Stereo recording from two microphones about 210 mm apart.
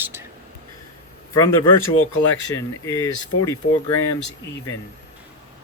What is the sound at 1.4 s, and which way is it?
Speech, 10° left (ahead or behind).